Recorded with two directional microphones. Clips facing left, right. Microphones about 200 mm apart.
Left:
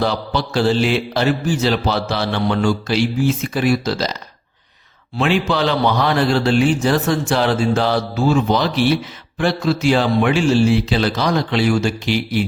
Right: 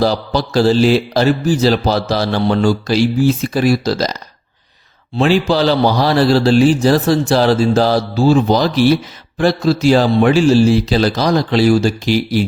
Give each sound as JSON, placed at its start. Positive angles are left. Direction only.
{"t": 0.0, "sound": "speech", "side_deg": -35}